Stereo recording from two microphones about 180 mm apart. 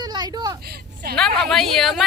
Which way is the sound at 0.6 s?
60° right (ahead or behind).